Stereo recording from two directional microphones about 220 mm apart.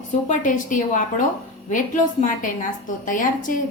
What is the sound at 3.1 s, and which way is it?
Speech, 35° left (ahead or behind).